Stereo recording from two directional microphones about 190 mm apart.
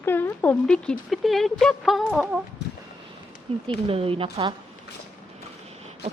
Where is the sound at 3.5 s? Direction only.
30° right (ahead or behind).